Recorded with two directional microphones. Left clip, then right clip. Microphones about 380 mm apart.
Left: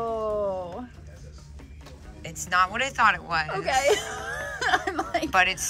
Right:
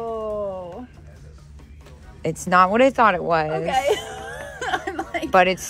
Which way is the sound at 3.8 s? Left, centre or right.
Left.